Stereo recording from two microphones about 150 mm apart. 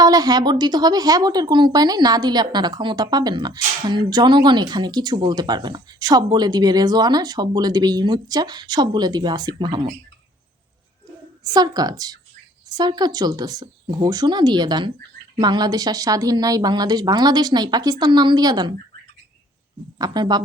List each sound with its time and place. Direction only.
0.0 s speech: 25° right (ahead or behind)
11.5 s speech: 25° right (ahead or behind)
20.0 s speech: 25° right (ahead or behind)